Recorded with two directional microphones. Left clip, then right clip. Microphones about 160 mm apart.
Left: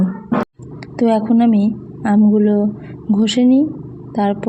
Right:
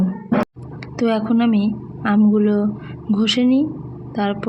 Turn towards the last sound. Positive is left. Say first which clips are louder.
# left 4 dB
turn(degrees=25)  # may be behind; listen again after turning